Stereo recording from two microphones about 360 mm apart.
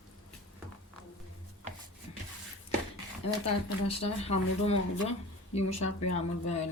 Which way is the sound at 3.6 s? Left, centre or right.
Centre.